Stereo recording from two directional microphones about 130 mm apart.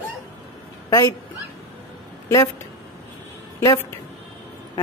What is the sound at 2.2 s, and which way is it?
Speech, 25° left (ahead or behind).